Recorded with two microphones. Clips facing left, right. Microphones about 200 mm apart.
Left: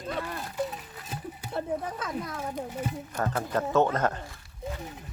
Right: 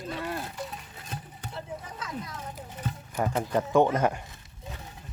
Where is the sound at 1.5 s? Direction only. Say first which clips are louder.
Left 8 dB; 55° left (ahead or behind).